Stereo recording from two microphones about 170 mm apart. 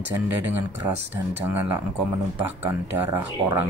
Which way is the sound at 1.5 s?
15° right (ahead or behind).